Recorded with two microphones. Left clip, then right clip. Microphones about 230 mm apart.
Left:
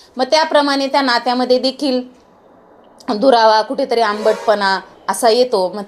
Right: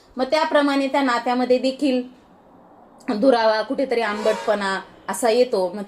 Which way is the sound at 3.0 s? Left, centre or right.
Centre.